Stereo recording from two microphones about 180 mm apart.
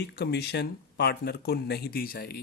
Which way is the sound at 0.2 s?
70° left (ahead or behind).